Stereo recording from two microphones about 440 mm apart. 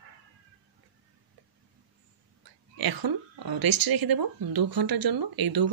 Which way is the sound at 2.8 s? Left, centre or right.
Right.